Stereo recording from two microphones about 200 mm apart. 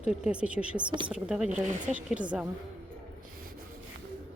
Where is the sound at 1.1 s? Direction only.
5° right (ahead or behind).